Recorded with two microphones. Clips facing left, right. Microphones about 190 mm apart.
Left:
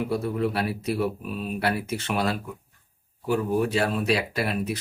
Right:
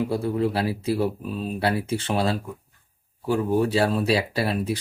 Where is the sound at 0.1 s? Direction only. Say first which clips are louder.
Right 2 dB; 30° right (ahead or behind).